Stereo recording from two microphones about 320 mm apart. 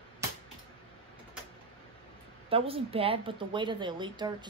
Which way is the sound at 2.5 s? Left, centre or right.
Centre.